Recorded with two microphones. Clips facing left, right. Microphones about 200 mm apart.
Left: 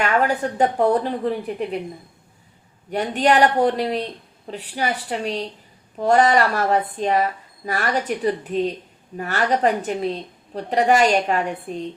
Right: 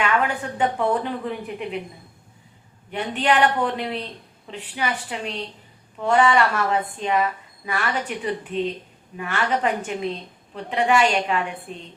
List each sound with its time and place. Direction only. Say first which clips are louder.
0.0 s a woman's voice: left 3 dB; 40° left (ahead or behind)
2.9 s a woman's voice: left 3 dB; 40° left (ahead or behind)